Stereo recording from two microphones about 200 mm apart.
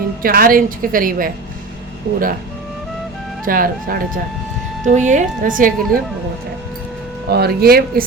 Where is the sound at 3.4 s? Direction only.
45° right (ahead or behind).